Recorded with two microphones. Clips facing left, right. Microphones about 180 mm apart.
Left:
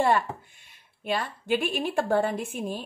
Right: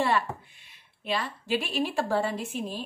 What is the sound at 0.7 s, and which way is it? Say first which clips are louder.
A woman's voice: left 2 dB; 50° left (ahead or behind).